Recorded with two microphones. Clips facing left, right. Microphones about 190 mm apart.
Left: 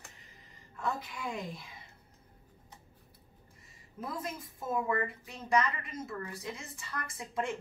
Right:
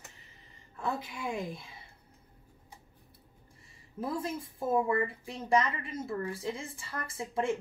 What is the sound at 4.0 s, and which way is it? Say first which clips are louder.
Speech: right 5 dB; 30° right (ahead or behind).